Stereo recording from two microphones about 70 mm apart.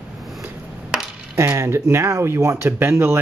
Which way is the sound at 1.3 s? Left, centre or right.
Right.